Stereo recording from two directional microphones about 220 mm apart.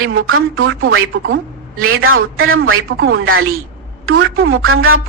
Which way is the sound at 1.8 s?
70° right (ahead or behind).